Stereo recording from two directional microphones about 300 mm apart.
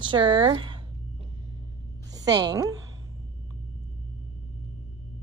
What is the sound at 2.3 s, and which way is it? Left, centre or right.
Speech, centre.